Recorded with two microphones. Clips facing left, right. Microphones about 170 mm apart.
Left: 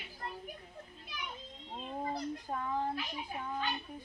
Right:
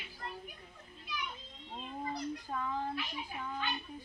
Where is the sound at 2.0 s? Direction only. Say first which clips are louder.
Left 1 dB; 35° left (ahead or behind).